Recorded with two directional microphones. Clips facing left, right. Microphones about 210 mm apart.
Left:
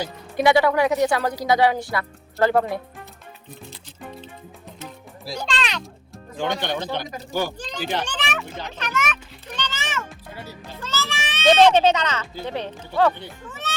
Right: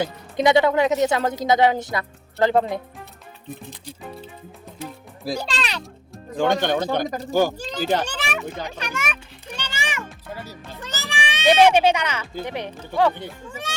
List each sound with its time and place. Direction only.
0.3 s a woman's voice: 20° right (ahead or behind)
5.4 s speech: 5° right (ahead or behind)
6.3 s a child's voice: 50° right (ahead or behind)
8.0 s speech: 10° right (ahead or behind)
9.6 s music: 10° right (ahead or behind)
12.4 s speech: 15° right (ahead or behind)